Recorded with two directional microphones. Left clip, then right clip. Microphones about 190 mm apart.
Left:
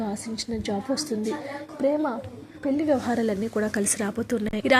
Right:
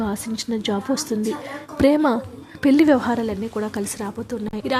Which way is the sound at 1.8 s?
35° right (ahead or behind).